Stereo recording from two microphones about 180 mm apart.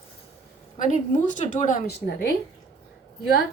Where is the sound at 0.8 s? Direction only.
45° left (ahead or behind).